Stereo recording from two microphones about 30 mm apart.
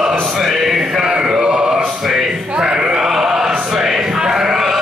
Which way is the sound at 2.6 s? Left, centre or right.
Right.